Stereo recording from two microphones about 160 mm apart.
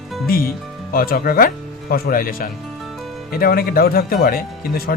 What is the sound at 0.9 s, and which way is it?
Speech, 70° left (ahead or behind).